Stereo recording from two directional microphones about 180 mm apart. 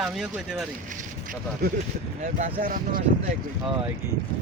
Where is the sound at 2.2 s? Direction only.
50° right (ahead or behind).